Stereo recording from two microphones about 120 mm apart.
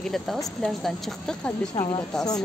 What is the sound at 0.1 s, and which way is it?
Speech, centre (ahead or behind).